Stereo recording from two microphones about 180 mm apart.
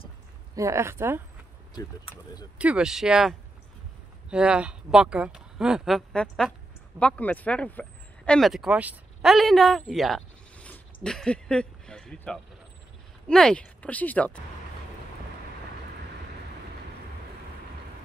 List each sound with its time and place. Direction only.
0.6 s speech: 15° right (ahead or behind)
1.8 s speech: 20° left (ahead or behind)
2.6 s speech: 5° right (ahead or behind)